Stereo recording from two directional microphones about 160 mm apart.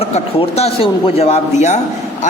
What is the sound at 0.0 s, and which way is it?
A man's voice, 40° left (ahead or behind).